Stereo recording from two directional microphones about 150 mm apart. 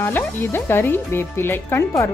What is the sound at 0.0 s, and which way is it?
Speech, 15° left (ahead or behind).